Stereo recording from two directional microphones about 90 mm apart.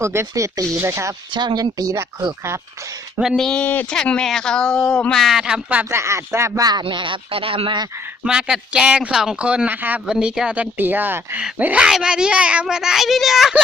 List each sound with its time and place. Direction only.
0.0 s speech: 30° right (ahead or behind)
1.3 s speech: 55° right (ahead or behind)
3.3 s speech: 5° left (ahead or behind)
3.6 s a woman's voice: 20° left (ahead or behind)
5.2 s speech: 5° right (ahead or behind)
5.9 s speech: 30° right (ahead or behind)
6.6 s speech: 45° right (ahead or behind)
6.8 s speech: 65° right (ahead or behind); by 7.8 s 85° right
8.2 s speech: 10° right (ahead or behind)